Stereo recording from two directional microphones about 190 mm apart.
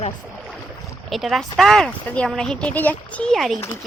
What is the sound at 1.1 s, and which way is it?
Speech, centre (ahead or behind).